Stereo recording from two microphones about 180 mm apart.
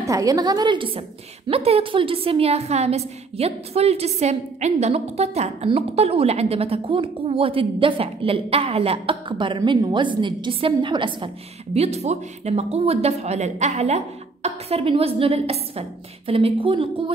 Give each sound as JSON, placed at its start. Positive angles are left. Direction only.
{"t": 0.0, "sound": "a woman's voice", "side_deg": -20}